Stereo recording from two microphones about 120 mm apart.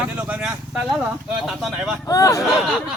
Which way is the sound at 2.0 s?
25° left (ahead or behind).